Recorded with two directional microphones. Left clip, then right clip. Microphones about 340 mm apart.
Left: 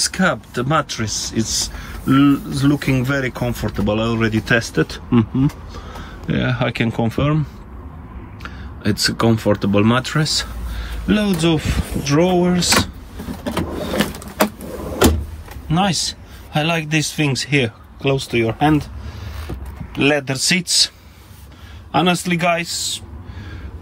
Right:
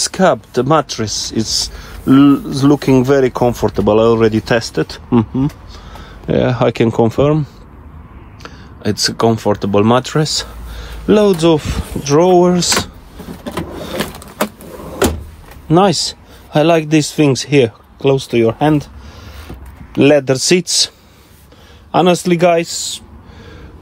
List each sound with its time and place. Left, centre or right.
0.0 s speech: centre
8.4 s a sound: centre
9.0 s speech: centre
15.7 s speech: centre
19.9 s speech: centre
21.9 s speech: centre